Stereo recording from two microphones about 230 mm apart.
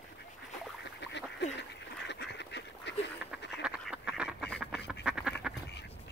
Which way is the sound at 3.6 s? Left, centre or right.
Centre.